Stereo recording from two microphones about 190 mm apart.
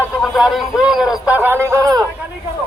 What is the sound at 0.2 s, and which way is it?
A man's voice, centre (ahead or behind).